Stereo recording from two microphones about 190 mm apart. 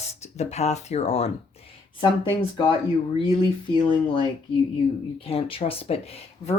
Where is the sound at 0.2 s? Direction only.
35° left (ahead or behind).